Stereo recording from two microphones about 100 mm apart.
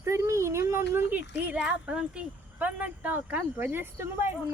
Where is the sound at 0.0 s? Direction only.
30° right (ahead or behind).